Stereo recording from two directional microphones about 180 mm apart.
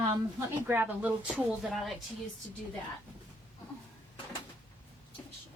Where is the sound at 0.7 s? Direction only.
10° right (ahead or behind).